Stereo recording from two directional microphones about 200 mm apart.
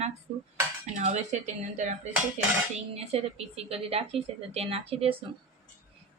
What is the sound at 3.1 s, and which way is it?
A woman's voice, 30° right (ahead or behind).